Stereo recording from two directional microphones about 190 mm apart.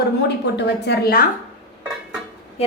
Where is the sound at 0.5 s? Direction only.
60° left (ahead or behind).